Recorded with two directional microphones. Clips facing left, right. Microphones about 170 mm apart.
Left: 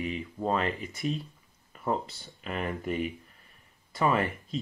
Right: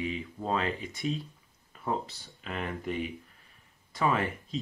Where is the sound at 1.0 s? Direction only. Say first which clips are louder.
Left 1 dB; 55° left (ahead or behind).